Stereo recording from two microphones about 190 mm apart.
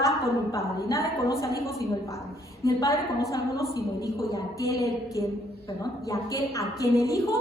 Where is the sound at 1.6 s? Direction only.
15° left (ahead or behind).